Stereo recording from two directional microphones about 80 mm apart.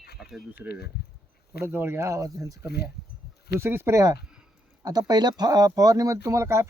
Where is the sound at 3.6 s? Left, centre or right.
Right.